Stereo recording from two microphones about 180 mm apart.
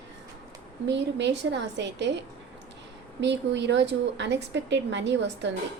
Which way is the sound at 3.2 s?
75° right (ahead or behind).